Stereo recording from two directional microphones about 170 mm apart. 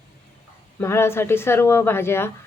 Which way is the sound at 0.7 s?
15° left (ahead or behind).